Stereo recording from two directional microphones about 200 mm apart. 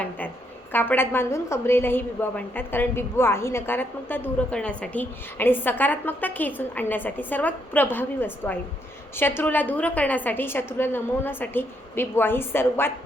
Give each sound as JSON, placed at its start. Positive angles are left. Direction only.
{"t": 0.7, "sound": "a woman's voice", "side_deg": 10}